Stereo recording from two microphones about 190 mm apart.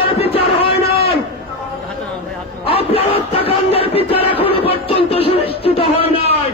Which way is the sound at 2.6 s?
30° left (ahead or behind).